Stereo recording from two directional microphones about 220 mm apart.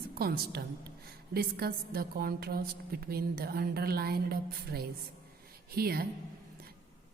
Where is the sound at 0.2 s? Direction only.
45° right (ahead or behind).